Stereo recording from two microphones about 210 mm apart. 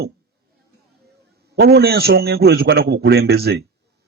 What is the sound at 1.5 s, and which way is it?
Speech, 50° right (ahead or behind).